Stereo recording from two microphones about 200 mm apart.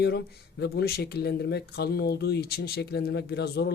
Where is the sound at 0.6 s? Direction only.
55° left (ahead or behind).